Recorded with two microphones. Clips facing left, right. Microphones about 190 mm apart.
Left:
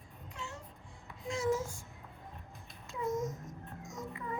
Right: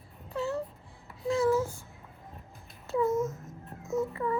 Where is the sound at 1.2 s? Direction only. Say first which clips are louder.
Right 7 dB; 35° right (ahead or behind).